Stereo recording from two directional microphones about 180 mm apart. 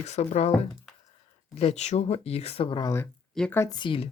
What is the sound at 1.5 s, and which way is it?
Speech, 35° left (ahead or behind).